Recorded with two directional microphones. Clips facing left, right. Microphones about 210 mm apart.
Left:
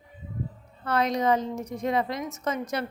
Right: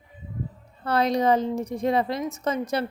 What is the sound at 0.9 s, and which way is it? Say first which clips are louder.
Speech: right 3 dB; 35° right (ahead or behind).